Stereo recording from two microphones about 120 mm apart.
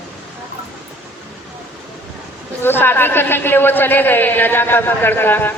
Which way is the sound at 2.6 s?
20° left (ahead or behind).